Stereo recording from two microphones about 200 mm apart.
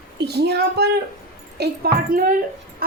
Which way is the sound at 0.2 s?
55° right (ahead or behind).